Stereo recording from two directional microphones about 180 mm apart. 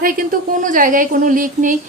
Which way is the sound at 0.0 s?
50° right (ahead or behind).